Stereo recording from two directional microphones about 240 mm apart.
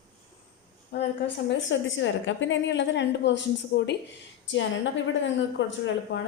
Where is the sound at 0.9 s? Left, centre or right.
Left.